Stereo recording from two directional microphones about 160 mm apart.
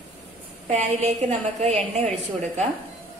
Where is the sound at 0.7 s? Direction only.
45° right (ahead or behind).